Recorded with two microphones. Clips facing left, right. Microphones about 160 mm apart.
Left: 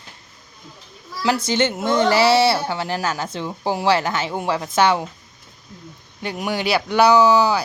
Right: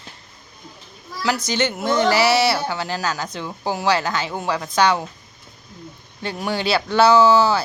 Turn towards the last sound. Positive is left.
turn(degrees=15)  # may be behind; listen again after turning